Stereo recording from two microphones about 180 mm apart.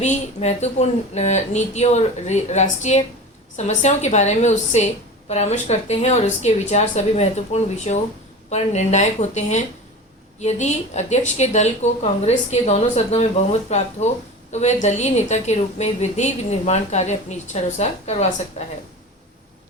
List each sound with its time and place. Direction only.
0.0 s a woman's voice: 40° left (ahead or behind)